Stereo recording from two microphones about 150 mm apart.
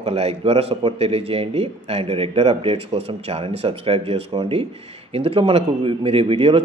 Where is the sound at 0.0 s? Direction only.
40° right (ahead or behind).